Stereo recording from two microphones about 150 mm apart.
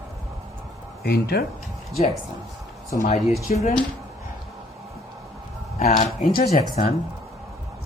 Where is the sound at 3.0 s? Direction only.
55° left (ahead or behind).